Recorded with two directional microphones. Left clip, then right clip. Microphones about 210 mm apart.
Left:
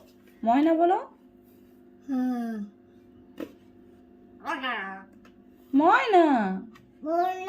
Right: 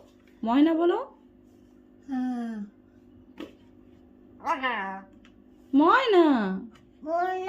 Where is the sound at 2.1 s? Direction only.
10° right (ahead or behind).